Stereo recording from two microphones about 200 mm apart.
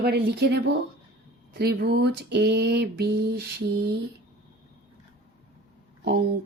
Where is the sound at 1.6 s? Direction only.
55° right (ahead or behind).